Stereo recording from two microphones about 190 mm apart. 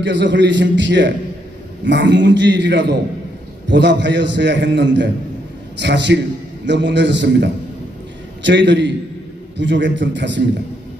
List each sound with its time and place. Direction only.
0.0 s a man's voice: 70° right (ahead or behind)